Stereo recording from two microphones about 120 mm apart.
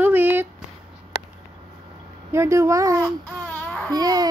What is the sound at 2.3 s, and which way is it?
Speech, 20° right (ahead or behind).